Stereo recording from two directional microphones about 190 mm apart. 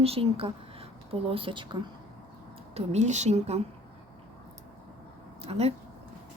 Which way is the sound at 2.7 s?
35° right (ahead or behind).